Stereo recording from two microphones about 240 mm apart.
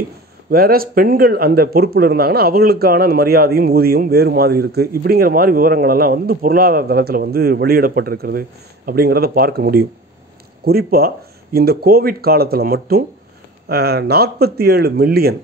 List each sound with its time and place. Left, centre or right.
0.5 s speech: right